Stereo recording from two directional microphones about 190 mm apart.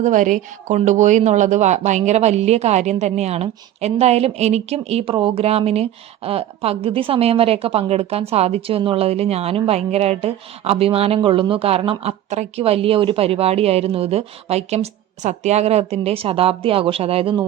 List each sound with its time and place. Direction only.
0.0 s a woman's voice: 45° right (ahead or behind)